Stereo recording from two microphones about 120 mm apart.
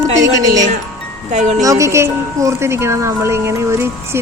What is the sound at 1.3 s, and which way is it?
Wind chime, 80° right.